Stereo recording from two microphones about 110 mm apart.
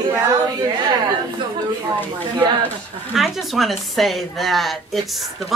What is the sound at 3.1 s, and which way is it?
A woman's voice, centre (ahead or behind).